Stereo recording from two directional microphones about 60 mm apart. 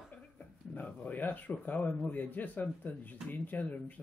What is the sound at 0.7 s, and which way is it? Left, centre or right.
Speech, left.